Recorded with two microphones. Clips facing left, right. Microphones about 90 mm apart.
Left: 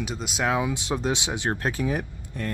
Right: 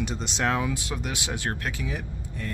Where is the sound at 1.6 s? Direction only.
40° left (ahead or behind).